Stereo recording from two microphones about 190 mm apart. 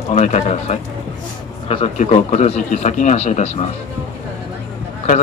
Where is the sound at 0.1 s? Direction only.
35° left (ahead or behind).